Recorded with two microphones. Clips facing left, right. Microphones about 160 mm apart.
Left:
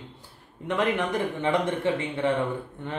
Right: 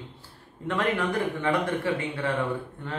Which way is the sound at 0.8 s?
20° left (ahead or behind).